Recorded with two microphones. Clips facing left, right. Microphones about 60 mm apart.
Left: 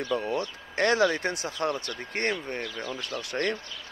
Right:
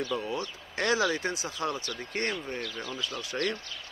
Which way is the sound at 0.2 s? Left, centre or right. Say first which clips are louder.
Left 4 dB; left.